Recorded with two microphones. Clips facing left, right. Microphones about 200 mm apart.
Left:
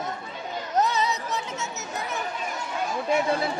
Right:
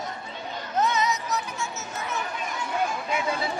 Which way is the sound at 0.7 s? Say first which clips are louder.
Even; 35° left (ahead or behind).